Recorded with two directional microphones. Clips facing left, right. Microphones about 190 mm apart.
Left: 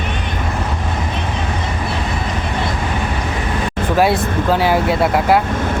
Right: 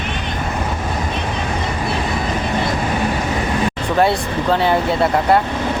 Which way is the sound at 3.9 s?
5° left (ahead or behind).